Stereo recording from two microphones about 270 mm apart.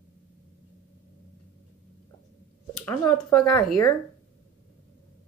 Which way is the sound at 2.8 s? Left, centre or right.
Centre.